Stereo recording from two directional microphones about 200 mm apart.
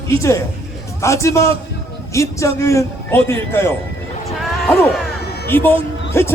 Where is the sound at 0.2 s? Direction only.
15° left (ahead or behind).